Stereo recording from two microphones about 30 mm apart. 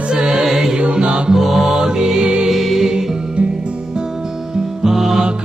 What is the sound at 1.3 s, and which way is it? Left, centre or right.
Music, centre.